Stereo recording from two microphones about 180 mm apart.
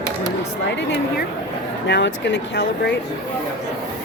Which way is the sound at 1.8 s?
75° left (ahead or behind).